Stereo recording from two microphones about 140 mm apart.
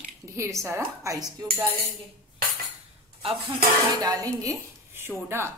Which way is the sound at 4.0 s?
25° right (ahead or behind).